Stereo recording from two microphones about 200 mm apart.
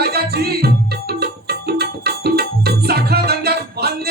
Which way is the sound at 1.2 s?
50° right (ahead or behind).